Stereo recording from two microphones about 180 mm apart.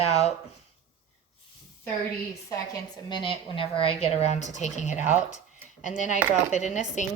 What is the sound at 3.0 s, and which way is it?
Speech, 25° left (ahead or behind).